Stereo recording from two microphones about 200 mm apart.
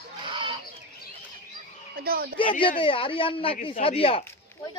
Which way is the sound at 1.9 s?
50° right (ahead or behind).